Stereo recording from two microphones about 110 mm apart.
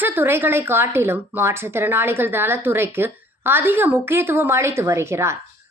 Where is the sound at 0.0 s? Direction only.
20° right (ahead or behind).